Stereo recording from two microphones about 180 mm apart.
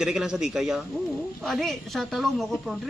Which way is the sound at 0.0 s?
5° right (ahead or behind).